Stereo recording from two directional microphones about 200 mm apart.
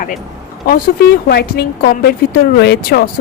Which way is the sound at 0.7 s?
50° left (ahead or behind).